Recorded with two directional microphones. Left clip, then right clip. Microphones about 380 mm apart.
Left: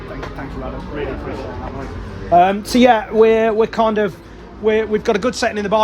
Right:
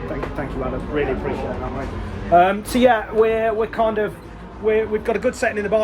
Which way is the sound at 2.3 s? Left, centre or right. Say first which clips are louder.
Left 2 dB; centre.